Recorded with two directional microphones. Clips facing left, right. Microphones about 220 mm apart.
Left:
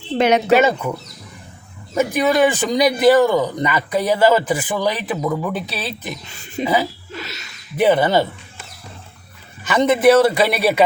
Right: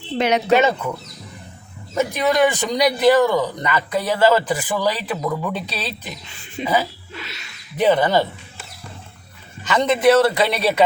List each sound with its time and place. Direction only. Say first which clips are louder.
0.2 s speech: left 4 dB; 50° left (ahead or behind)
0.5 s a man's voice: right 1 dB; 10° left (ahead or behind)
2.0 s a man's voice: left 2 dB; 10° left (ahead or behind)
5.0 s a man's voice: left 2 dB; 10° left (ahead or behind)
6.6 s speech: left 4 dB; 40° left (ahead or behind)
7.2 s a sound: left 4 dB; 40° left (ahead or behind)
7.8 s a man's voice: left 1 dB; 10° left (ahead or behind)
9.6 s a man's voice: left 2 dB; 10° left (ahead or behind)